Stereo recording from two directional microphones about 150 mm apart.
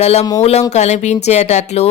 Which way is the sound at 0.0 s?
45° left (ahead or behind).